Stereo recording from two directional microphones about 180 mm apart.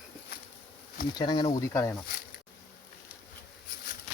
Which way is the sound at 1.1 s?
25° left (ahead or behind).